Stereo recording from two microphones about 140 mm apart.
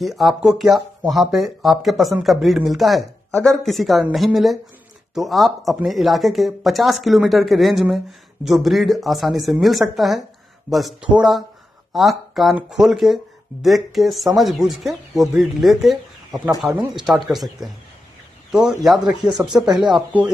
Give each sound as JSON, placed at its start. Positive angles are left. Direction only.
{"t": 0.0, "sound": "speech", "side_deg": 0}
{"t": 19.3, "sound": "speech", "side_deg": -30}
{"t": 19.9, "sound": "speech", "side_deg": -10}